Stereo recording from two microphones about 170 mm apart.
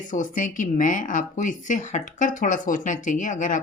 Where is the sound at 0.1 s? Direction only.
50° left (ahead or behind).